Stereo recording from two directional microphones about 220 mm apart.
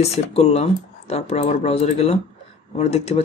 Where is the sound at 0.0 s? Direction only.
30° left (ahead or behind).